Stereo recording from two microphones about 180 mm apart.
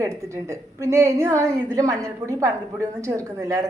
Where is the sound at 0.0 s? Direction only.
15° right (ahead or behind).